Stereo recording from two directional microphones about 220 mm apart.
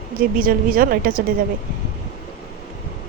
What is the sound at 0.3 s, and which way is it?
Speech, 40° right (ahead or behind).